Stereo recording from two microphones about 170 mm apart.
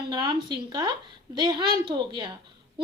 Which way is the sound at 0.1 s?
25° right (ahead or behind).